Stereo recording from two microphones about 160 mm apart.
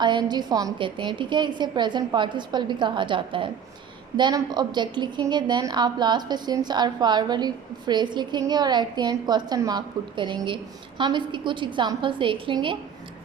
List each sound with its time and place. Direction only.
0.0 s a woman's voice: 25° right (ahead or behind)